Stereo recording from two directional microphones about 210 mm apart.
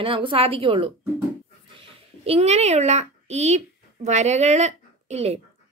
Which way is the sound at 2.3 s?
30° right (ahead or behind).